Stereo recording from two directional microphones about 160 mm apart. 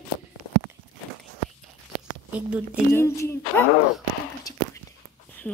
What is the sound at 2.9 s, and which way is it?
Speech, 15° left (ahead or behind).